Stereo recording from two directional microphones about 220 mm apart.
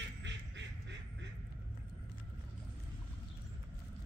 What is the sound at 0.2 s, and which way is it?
Quack, 55° right (ahead or behind).